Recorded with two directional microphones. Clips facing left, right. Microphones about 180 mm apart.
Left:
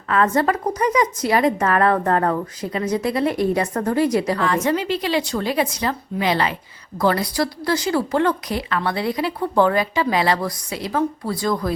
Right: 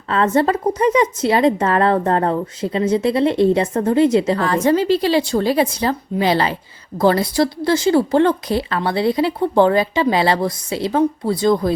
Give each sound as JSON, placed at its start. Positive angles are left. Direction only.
{"t": 0.1, "sound": "a woman's voice", "side_deg": -25}